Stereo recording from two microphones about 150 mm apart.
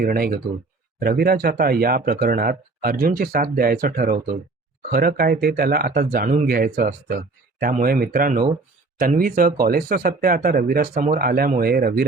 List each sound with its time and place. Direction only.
0.0 s speech: 85° right
0.9 s speech: 70° right (ahead or behind); by 12.0 s 90° right